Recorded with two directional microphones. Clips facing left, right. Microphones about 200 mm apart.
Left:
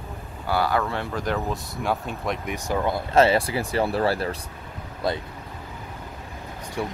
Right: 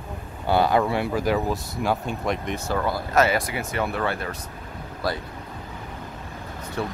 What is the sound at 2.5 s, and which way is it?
Speech, 15° left (ahead or behind).